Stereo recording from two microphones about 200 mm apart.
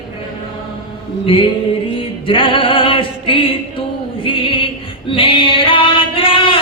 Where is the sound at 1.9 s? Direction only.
25° left (ahead or behind).